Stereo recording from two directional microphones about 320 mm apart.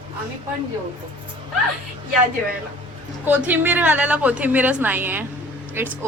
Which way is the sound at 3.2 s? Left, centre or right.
Centre.